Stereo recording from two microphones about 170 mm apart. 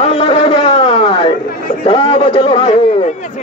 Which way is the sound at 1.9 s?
30° left (ahead or behind).